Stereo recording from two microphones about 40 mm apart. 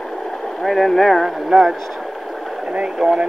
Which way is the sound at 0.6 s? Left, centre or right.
Centre.